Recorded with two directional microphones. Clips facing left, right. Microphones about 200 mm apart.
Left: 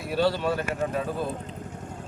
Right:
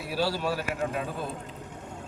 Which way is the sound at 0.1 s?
5° right (ahead or behind).